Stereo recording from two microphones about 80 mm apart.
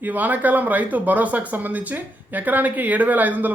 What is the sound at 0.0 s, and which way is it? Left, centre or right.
Speech, right.